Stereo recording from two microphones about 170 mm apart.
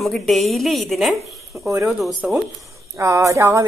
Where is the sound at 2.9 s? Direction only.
15° right (ahead or behind).